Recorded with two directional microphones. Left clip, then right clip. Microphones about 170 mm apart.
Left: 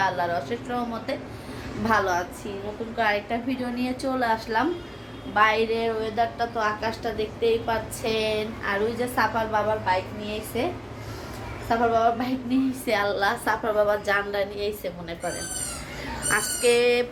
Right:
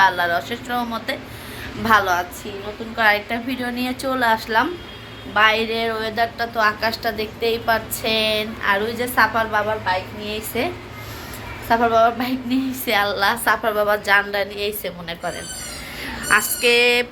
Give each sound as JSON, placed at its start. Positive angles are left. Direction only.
{"t": 0.0, "sound": "a woman's voice", "side_deg": 0}
{"t": 11.7, "sound": "a woman's voice", "side_deg": -20}
{"t": 12.8, "sound": "a woman's voice", "side_deg": 0}
{"t": 16.3, "sound": "a woman's voice", "side_deg": 0}